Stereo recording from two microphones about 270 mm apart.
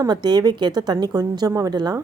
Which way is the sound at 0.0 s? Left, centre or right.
Centre.